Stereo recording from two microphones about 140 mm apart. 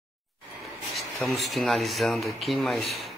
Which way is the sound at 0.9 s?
Centre (ahead or behind).